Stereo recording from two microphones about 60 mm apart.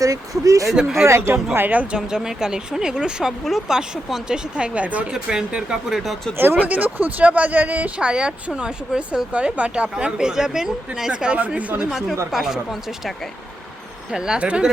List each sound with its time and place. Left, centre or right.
0.0 s speech: right
0.8 s speech: centre
1.0 s speech: right
1.5 s speech: right
3.4 s speech: centre
3.8 s speech: centre
6.3 s speech: right
11.8 s speech: centre
14.1 s speech: centre